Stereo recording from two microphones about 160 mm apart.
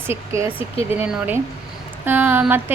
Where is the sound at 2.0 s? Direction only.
10° right (ahead or behind).